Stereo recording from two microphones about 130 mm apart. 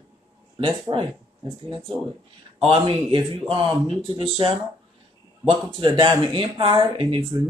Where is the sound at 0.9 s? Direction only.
35° right (ahead or behind).